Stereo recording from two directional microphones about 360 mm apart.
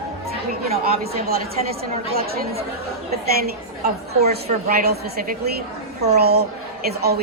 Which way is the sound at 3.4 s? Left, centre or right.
Right.